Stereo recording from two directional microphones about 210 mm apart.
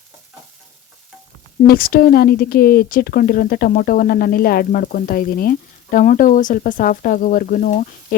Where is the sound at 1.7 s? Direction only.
45° left (ahead or behind).